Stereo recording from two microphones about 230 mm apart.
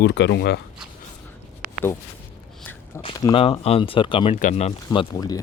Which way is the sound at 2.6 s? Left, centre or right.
Centre.